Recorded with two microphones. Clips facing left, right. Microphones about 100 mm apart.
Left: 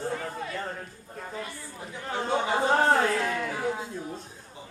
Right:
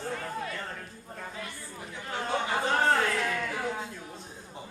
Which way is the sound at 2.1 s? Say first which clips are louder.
Left 3 dB; 25° left (ahead or behind).